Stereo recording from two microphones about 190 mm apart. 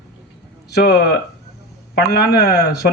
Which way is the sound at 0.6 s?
60° left (ahead or behind).